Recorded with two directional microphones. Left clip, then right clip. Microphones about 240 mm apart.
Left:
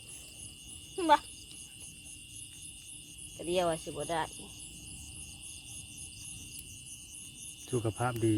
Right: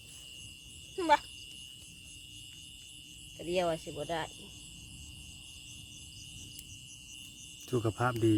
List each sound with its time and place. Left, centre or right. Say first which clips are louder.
0.9 s a sound: left 1 dB; centre
3.3 s speech: left 1 dB; centre
7.7 s speech: right 2 dB; centre